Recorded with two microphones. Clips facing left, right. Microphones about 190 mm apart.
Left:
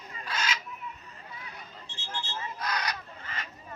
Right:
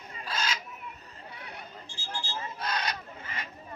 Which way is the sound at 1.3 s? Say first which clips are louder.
Right 2 dB; 65° right (ahead or behind).